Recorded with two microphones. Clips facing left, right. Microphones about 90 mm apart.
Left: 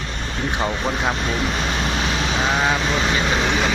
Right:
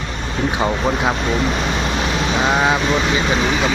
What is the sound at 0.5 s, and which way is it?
Speech, 15° right (ahead or behind).